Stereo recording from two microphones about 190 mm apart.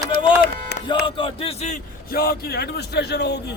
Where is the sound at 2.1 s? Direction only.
55° left (ahead or behind).